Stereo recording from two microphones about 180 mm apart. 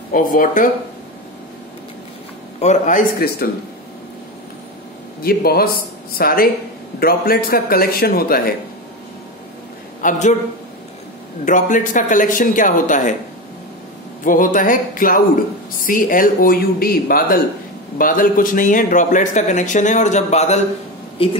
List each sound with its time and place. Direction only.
0.1 s speech: 50° left (ahead or behind)
2.6 s speech: 40° left (ahead or behind)
5.2 s a man's voice: 55° left (ahead or behind)
10.0 s a man's voice: 40° left (ahead or behind)
11.4 s speech: 45° left (ahead or behind)
14.2 s a man's voice: 50° left (ahead or behind); by 21.3 s 30° left (ahead or behind)